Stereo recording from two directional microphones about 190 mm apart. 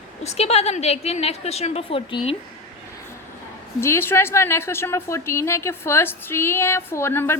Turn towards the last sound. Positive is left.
turn(degrees=10)  # may be behind; listen again after turning